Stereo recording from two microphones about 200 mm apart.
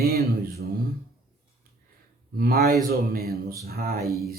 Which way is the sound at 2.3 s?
50° right (ahead or behind).